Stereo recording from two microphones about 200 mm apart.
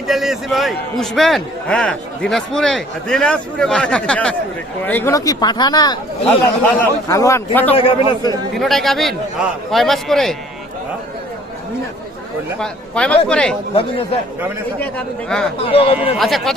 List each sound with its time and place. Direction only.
0.1 s a man's voice: centre (ahead or behind); by 6.0 s 20° left (ahead or behind)
6.2 s a man's voice: 10° left (ahead or behind)
7.8 s speech: 20° left (ahead or behind)
8.5 s a man's voice: centre (ahead or behind)
12.5 s a man's voice: 5° left (ahead or behind)
13.7 s speech: 30° left (ahead or behind)
14.8 s a man's voice: 5° left (ahead or behind)
15.7 s speech: 30° left (ahead or behind)
16.1 s a man's voice: centre (ahead or behind)